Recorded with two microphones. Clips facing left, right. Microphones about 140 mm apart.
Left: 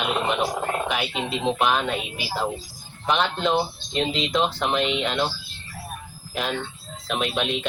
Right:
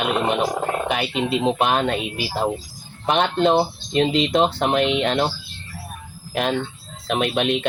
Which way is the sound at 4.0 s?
55° right (ahead or behind).